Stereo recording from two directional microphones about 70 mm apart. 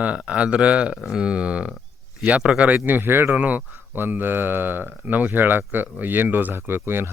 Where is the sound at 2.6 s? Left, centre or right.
Right.